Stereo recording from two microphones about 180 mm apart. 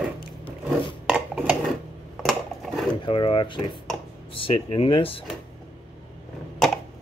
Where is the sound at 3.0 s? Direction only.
30° left (ahead or behind).